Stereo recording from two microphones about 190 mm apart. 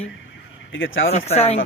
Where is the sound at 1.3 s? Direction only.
35° left (ahead or behind).